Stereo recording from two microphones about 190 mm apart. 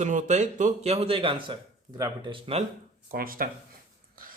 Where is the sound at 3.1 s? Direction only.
50° right (ahead or behind).